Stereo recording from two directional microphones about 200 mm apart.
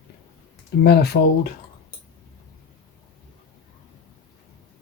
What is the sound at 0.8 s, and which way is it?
Speech, 55° left (ahead or behind).